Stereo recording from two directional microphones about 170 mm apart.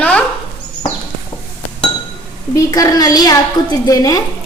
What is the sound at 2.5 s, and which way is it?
A woman's voice, 20° left (ahead or behind).